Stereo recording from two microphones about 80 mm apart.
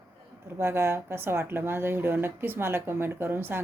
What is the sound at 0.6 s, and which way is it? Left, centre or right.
Speech, right.